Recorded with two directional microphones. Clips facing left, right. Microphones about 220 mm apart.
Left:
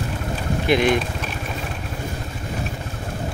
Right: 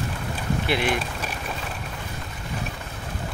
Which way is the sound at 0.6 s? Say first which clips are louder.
Left 8 dB; 15° left (ahead or behind).